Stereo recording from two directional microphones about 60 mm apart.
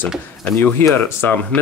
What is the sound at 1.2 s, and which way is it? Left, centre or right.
Speech, left.